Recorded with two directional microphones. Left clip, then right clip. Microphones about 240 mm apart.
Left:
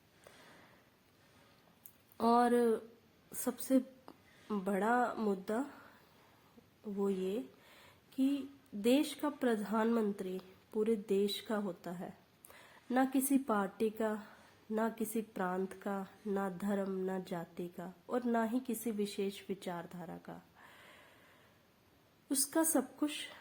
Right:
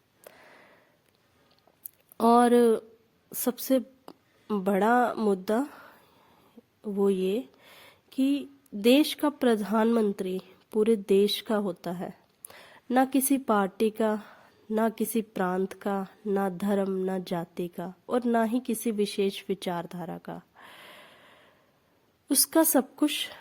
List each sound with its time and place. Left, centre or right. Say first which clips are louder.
2.1 s a sound: right 9 dB; right
3.4 s a woman's voice: right 8 dB; right
22.3 s a woman's voice: right 10 dB; right